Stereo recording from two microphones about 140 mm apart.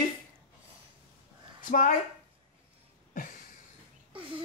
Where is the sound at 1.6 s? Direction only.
70° left (ahead or behind).